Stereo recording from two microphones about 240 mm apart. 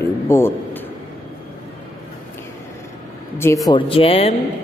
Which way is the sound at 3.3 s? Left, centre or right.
Centre.